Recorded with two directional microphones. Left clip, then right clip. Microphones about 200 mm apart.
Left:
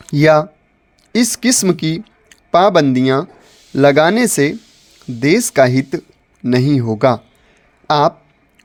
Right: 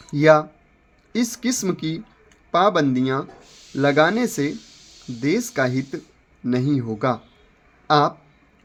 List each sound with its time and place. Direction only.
0.0 s speech: 50° left (ahead or behind)